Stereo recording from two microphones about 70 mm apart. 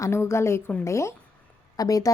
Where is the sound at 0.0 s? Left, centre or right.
Left.